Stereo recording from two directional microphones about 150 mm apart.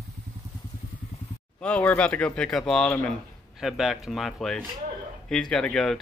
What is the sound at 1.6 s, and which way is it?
Speech, 10° left (ahead or behind).